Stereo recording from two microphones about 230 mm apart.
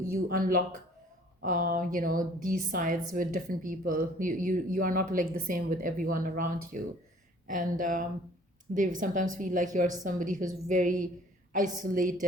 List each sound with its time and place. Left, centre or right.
0.1 s speech: right